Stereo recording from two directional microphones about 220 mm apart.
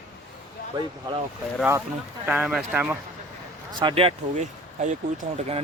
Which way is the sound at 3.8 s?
25° right (ahead or behind).